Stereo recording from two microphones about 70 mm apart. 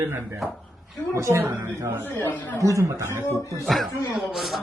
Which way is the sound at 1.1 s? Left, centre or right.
Right.